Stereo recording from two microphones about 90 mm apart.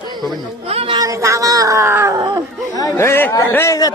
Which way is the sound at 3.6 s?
45° left (ahead or behind).